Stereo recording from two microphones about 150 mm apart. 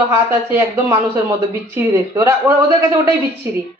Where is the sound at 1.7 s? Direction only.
20° right (ahead or behind).